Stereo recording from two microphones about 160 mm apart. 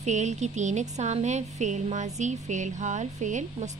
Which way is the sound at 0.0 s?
45° right (ahead or behind).